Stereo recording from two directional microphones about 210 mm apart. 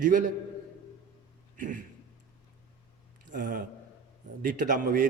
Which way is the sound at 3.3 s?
40° right (ahead or behind).